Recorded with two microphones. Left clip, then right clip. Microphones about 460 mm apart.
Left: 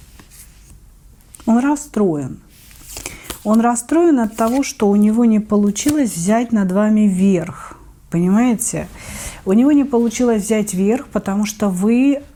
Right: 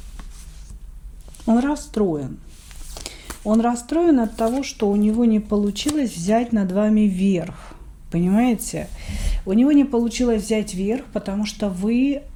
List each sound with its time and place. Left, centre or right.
1.5 s speech: left
3.4 s speech: left